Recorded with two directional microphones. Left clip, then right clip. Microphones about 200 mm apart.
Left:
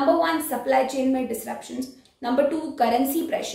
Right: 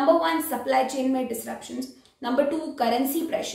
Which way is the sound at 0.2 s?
Centre (ahead or behind).